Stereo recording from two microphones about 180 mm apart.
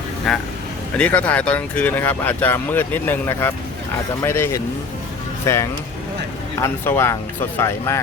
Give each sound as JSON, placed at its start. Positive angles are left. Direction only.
{"t": 0.3, "sound": "speech", "side_deg": 0}